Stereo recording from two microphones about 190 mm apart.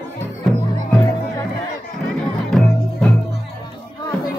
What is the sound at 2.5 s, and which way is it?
Music, centre (ahead or behind).